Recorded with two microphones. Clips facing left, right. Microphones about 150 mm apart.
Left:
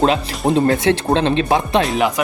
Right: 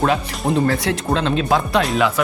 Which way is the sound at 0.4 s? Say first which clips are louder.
Left 4 dB; 25° left (ahead or behind).